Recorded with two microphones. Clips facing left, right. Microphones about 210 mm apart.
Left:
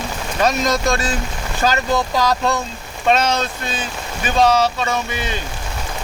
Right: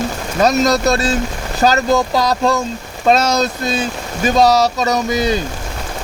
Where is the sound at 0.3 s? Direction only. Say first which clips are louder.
Right 5 dB; 40° right (ahead or behind).